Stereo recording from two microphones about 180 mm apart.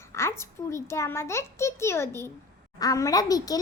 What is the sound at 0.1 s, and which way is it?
A woman's voice, 15° left (ahead or behind).